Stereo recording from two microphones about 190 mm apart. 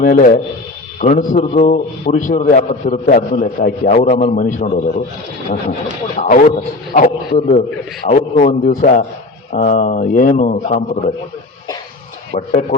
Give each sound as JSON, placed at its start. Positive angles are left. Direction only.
{"t": 0.0, "sound": "a man's voice", "side_deg": 45}
{"t": 6.1, "sound": "a man's voice", "side_deg": 45}
{"t": 12.3, "sound": "a man's voice", "side_deg": 40}